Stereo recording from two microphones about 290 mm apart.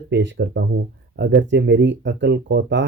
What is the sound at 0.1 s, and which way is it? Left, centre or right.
Speech, right.